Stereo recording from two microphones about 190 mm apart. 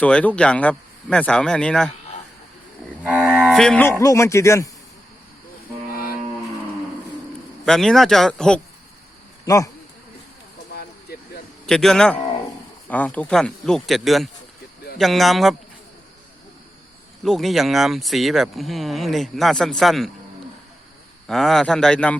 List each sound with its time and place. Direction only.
0.0 s speech: 5° left (ahead or behind)
3.0 s livestock: 5° right (ahead or behind)
3.6 s speech: 5° left (ahead or behind)
7.6 s speech: centre (ahead or behind)
11.1 s a sound: 55° left (ahead or behind)
11.6 s speech: centre (ahead or behind)
17.2 s speech: centre (ahead or behind)
21.2 s speech: centre (ahead or behind)